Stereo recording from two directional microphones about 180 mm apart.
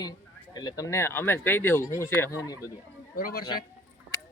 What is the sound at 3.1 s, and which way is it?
Speech, 55° left (ahead or behind).